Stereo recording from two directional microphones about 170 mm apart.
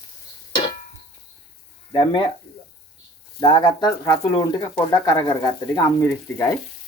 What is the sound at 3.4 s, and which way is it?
Speech, 25° left (ahead or behind).